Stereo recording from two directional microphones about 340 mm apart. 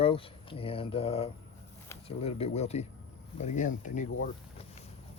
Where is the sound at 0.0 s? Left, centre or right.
Centre.